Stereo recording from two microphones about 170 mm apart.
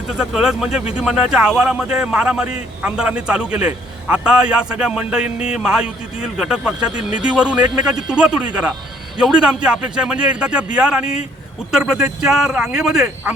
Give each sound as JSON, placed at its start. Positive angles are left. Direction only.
{"t": 0.1, "sound": "a man's voice", "side_deg": -5}
{"t": 11.0, "sound": "speech", "side_deg": 40}
{"t": 11.7, "sound": "a man's voice", "side_deg": -5}